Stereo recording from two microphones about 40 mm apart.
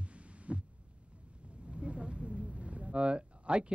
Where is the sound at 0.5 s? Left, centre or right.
Right.